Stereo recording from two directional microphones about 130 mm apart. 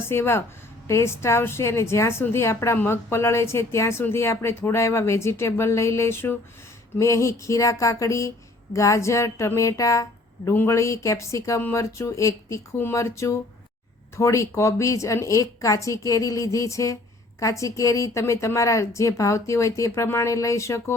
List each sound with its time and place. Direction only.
0.1 s a woman's voice: 20° left (ahead or behind)